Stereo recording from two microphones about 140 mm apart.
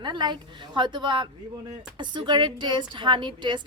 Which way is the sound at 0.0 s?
30° right (ahead or behind).